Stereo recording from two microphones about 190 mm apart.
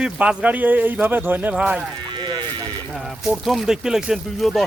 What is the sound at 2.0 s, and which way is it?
Sheep, 25° right (ahead or behind).